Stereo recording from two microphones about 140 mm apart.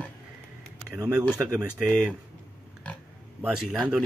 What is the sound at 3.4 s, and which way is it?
Speech, 5° right (ahead or behind).